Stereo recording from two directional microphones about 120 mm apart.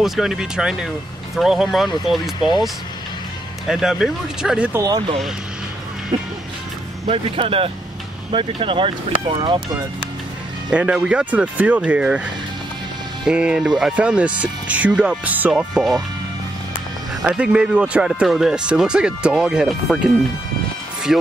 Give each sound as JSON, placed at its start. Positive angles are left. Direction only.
{"t": 0.0, "sound": "speech", "side_deg": 0}
{"t": 3.6, "sound": "speech", "side_deg": 0}
{"t": 4.7, "sound": "speech", "side_deg": -30}
{"t": 7.1, "sound": "speech", "side_deg": -50}
{"t": 10.7, "sound": "speech", "side_deg": -10}
{"t": 13.2, "sound": "speech", "side_deg": -10}
{"t": 17.2, "sound": "speech", "side_deg": -10}